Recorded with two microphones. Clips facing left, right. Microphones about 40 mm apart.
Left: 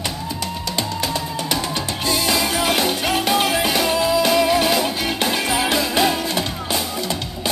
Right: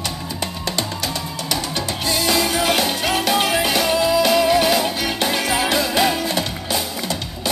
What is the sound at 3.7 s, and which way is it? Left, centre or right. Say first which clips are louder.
Music: right 1 dB; centre.